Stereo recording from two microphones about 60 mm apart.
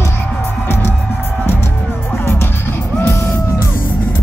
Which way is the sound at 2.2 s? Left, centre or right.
Left.